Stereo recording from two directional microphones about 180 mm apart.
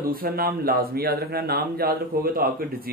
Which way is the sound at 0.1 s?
55° right (ahead or behind).